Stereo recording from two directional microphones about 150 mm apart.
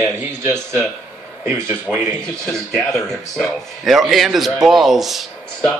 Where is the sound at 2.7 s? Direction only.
5° left (ahead or behind).